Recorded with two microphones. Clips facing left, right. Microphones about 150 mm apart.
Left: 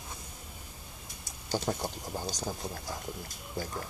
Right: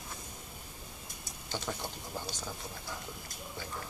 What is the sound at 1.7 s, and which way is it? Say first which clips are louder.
Speech: left 5 dB; 35° left (ahead or behind).